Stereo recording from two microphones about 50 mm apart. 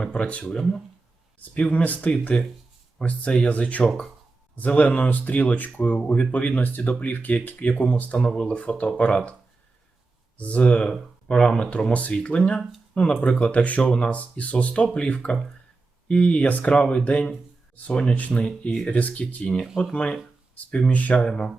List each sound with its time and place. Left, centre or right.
0.1 s speech: left
0.4 s speech: centre
1.4 s speech: left
8.3 s speech: centre
9.0 s speech: left
10.3 s speech: left
18.1 s speech: left
20.9 s speech: left
21.2 s speech: centre